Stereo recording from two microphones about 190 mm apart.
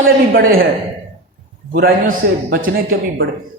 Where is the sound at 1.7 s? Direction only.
50° right (ahead or behind).